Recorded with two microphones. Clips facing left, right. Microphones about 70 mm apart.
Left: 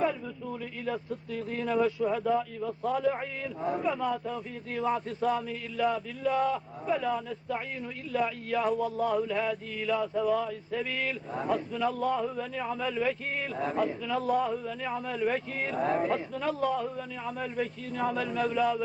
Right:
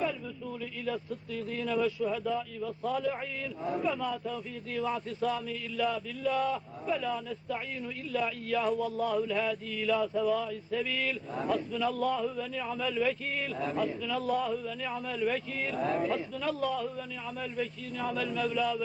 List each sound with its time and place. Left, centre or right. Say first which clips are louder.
0.9 s speech: left 2 dB; left
8.1 s mantra: left 2 dB; left
10.2 s mantra: left 1 dB; left
11.9 s speech: left 1 dB; left